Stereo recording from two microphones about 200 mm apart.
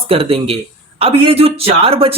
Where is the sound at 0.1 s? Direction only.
30° right (ahead or behind).